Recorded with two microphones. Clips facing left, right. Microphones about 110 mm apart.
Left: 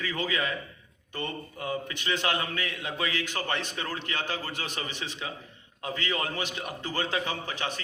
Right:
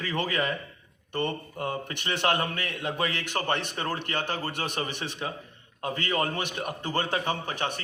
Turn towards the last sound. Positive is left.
turn(degrees=-55)  # may be behind; listen again after turning